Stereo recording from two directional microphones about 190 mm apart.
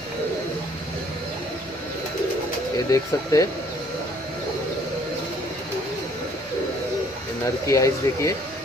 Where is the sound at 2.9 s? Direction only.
15° left (ahead or behind).